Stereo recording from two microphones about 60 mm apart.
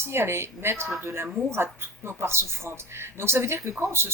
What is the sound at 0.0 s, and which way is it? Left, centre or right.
Speech, right.